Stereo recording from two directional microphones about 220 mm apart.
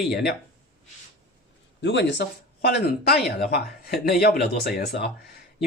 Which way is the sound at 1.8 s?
55° left (ahead or behind).